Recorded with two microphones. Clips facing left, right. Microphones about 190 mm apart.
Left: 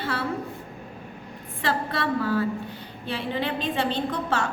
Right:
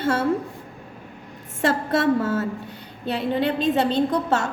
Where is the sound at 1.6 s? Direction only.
45° right (ahead or behind).